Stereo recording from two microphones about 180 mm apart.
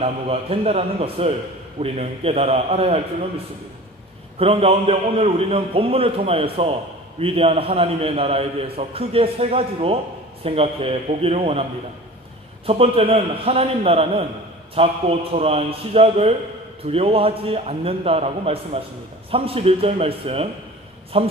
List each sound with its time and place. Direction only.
0.0 s a man's voice: 30° right (ahead or behind)
12.6 s a man's voice: 35° right (ahead or behind)